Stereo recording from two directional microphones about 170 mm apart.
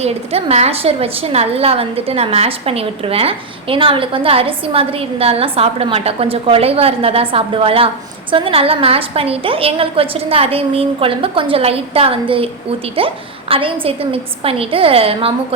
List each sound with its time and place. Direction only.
0.0 s a woman's voice: 35° right (ahead or behind)